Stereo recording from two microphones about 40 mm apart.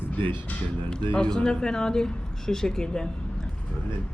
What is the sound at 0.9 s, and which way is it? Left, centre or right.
Speech, left.